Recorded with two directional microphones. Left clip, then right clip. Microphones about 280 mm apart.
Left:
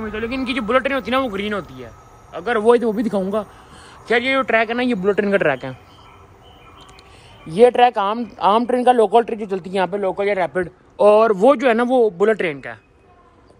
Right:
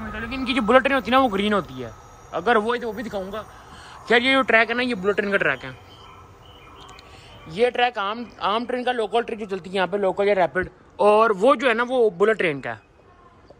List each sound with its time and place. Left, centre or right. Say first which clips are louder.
0.0 s speech: left 5 dB; centre
2.6 s a man's voice: left 10 dB; centre
4.0 s speech: left 1 dB; centre
7.4 s speech: left 8 dB; centre